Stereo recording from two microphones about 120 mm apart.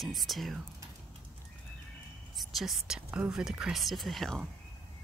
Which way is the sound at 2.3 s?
Centre (ahead or behind).